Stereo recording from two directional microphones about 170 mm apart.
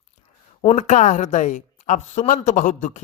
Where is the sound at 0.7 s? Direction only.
45° left (ahead or behind).